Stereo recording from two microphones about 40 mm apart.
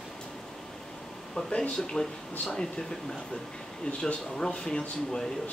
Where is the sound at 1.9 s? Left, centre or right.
Centre.